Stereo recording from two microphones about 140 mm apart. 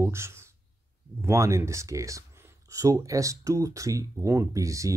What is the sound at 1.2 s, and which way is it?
Speech, 20° right (ahead or behind).